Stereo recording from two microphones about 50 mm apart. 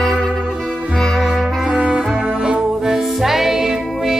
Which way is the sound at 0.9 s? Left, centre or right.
Centre.